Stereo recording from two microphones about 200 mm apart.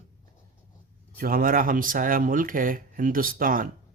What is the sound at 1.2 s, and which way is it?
Speech, 45° right (ahead or behind).